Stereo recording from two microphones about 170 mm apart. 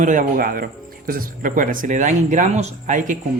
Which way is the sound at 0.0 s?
50° right (ahead or behind).